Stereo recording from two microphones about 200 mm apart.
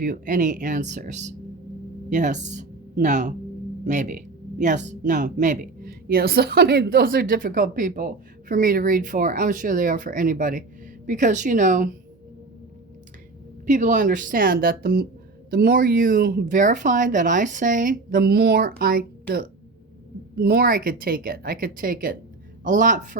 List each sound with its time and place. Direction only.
0.0 s speech: 40° right (ahead or behind)
13.7 s speech: 40° right (ahead or behind)
20.3 s speech: 50° right (ahead or behind)